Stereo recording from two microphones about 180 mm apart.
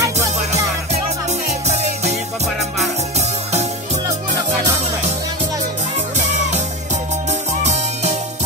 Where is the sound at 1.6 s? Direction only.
35° right (ahead or behind).